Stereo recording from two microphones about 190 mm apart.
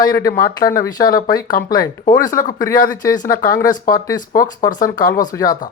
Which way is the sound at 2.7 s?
45° left (ahead or behind).